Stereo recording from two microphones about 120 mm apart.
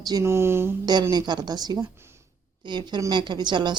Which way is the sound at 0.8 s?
35° right (ahead or behind).